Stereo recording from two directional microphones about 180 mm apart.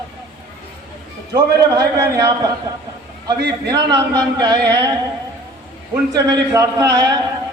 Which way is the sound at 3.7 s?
20° right (ahead or behind).